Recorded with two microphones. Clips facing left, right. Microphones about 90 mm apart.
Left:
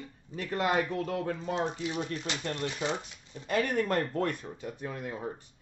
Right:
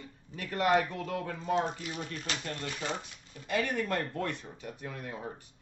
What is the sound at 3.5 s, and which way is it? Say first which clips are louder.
Speech: left 3 dB; 45° left (ahead or behind).